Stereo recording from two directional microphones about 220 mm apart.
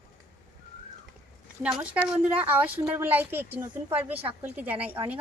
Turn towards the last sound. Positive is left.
turn(degrees=-10)  # may be behind; listen again after turning